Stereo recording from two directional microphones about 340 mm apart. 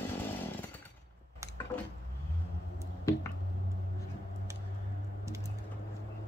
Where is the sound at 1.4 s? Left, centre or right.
Centre.